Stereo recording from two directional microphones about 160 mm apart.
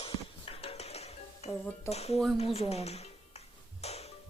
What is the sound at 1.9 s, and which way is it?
Speech, 40° left (ahead or behind).